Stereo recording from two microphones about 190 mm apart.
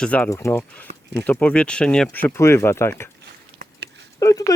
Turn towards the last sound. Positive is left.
turn(degrees=20)  # may be behind; listen again after turning